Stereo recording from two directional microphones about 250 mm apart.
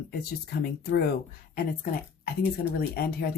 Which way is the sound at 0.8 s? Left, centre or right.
Left.